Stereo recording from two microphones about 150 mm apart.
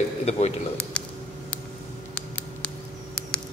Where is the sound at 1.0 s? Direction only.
5° left (ahead or behind).